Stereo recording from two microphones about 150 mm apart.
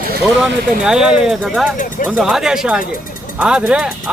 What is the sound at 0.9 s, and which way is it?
Speech, 5° right (ahead or behind).